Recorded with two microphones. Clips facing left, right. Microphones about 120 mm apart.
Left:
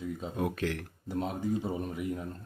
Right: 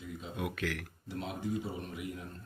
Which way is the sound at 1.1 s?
45° left (ahead or behind).